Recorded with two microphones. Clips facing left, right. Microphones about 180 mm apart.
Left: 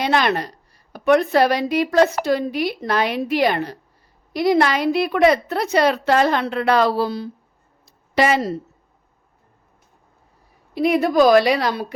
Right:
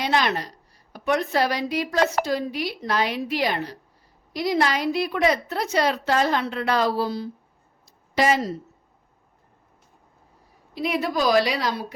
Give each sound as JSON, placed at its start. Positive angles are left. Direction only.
{"t": 0.0, "sound": "a woman's voice", "side_deg": 55}
{"t": 7.9, "sound": "a sound", "side_deg": 65}
{"t": 10.8, "sound": "a woman's voice", "side_deg": 55}